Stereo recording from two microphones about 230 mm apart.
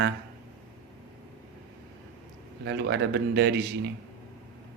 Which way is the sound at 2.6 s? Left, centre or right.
Right.